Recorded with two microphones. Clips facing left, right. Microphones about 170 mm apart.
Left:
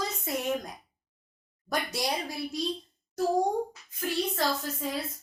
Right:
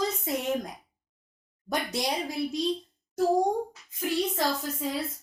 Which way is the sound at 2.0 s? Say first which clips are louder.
Right 2 dB; 20° right (ahead or behind).